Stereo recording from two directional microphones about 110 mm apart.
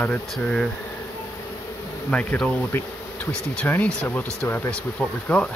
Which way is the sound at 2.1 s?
10° left (ahead or behind).